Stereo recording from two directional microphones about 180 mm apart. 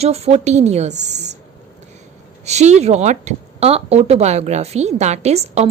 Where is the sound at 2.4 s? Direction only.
40° right (ahead or behind).